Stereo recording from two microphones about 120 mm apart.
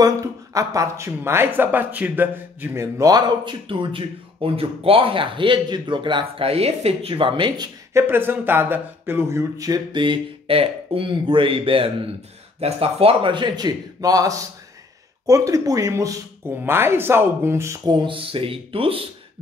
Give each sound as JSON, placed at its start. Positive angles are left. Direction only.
{"t": 0.0, "sound": "speech", "side_deg": -30}
{"t": 7.9, "sound": "speech", "side_deg": -20}
{"t": 17.8, "sound": "speech", "side_deg": -40}